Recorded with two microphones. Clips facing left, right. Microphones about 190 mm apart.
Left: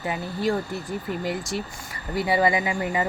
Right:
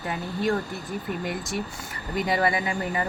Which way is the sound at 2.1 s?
10° left (ahead or behind).